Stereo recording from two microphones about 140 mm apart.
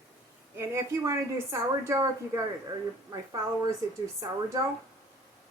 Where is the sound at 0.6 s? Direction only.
20° right (ahead or behind).